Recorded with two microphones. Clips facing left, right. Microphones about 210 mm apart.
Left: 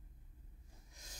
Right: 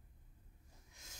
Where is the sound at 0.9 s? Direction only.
35° left (ahead or behind).